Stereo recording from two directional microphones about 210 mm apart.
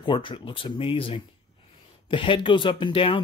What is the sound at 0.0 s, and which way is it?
Speech, 25° left (ahead or behind).